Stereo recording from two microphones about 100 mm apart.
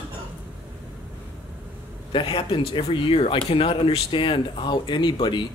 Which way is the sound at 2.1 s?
60° left (ahead or behind).